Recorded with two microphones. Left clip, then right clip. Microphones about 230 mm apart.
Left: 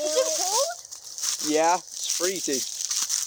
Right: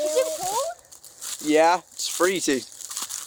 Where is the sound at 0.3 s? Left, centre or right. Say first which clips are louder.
Left 1 dB; left.